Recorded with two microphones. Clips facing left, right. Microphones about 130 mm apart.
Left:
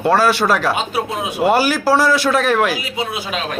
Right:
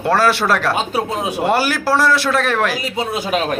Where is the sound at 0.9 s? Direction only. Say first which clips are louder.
Right 1 dB; 35° right (ahead or behind).